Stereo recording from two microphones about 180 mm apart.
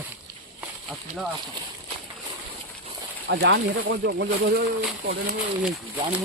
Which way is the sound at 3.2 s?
70° right (ahead or behind).